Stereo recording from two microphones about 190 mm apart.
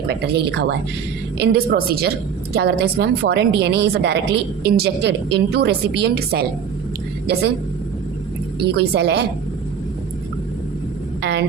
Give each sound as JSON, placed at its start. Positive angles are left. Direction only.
{"t": 0.1, "sound": "speech", "side_deg": -60}
{"t": 8.7, "sound": "speech", "side_deg": -60}
{"t": 11.2, "sound": "a sound", "side_deg": -65}